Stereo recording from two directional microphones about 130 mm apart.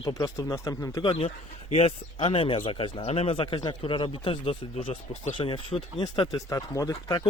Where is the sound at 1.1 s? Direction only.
50° left (ahead or behind).